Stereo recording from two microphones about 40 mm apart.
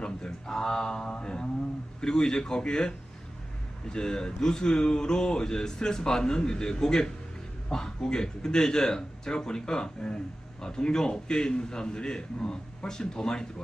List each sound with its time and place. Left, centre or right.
0.0 s speech: centre
3.9 s speech: centre